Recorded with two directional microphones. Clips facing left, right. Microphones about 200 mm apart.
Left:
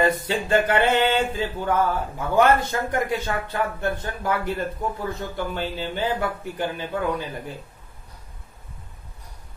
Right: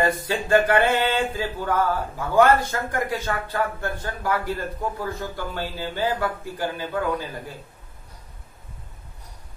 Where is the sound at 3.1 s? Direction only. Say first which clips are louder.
Left 1 dB; 20° left (ahead or behind).